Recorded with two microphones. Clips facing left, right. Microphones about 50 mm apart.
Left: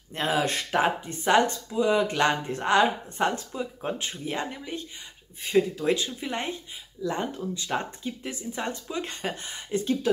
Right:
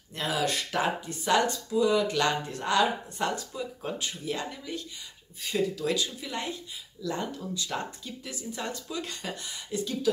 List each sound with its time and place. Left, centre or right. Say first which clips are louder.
0.1 s speech: left 3 dB; left